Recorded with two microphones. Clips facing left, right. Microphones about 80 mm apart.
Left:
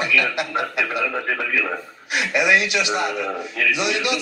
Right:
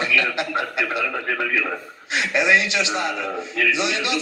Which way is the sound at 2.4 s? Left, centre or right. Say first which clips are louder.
Even; right.